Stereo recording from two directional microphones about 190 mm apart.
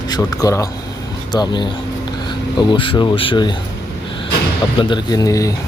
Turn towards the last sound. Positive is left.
turn(degrees=15)  # may be behind; listen again after turning